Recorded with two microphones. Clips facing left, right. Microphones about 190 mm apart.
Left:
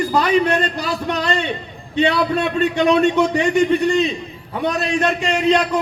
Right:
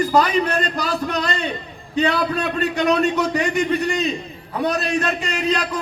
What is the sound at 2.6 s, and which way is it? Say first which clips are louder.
Speech: left 3 dB; 40° right (ahead or behind).